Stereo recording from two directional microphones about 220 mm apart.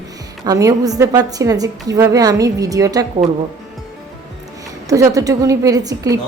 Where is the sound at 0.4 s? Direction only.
15° right (ahead or behind).